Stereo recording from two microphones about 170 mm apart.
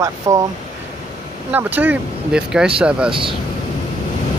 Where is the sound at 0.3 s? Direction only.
20° right (ahead or behind).